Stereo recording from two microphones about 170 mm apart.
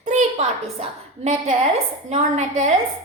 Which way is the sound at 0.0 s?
40° right (ahead or behind).